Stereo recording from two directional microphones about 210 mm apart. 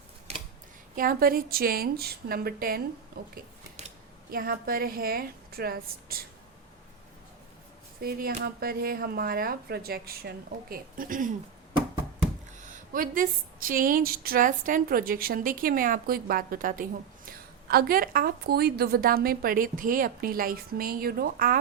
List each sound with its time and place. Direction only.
0.9 s speech: 45° right (ahead or behind)
8.0 s speech: 45° right (ahead or behind)
12.5 s speech: 35° right (ahead or behind)